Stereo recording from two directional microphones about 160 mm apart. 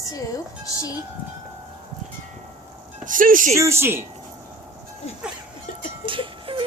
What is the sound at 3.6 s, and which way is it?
Speech, 15° right (ahead or behind).